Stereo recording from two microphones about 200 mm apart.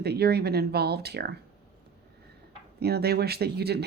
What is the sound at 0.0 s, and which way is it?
Speech, 55° right (ahead or behind).